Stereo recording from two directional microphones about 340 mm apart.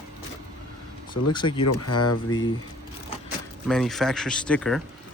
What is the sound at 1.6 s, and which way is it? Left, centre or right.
Speech, left.